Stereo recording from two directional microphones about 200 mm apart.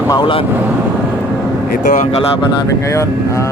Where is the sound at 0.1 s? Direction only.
25° left (ahead or behind).